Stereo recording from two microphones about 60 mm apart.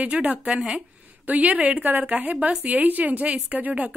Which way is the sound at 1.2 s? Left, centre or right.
Right.